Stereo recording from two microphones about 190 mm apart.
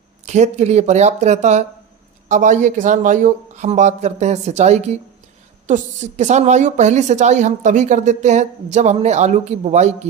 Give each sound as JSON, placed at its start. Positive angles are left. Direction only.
{"t": 0.3, "sound": "a woman's voice", "side_deg": -35}